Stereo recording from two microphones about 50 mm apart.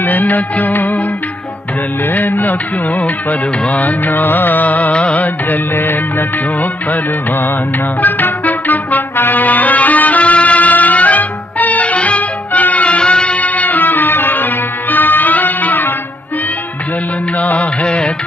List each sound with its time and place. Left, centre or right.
0.0 s music: left
2.0 s music: left
5.8 s music: left
17.4 s music: left